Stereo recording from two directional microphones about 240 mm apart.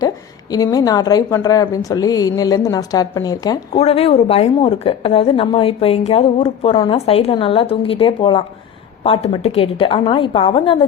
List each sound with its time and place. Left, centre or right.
0.5 s a woman's voice: centre